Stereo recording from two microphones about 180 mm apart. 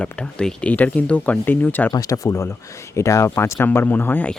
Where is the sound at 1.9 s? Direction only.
20° left (ahead or behind).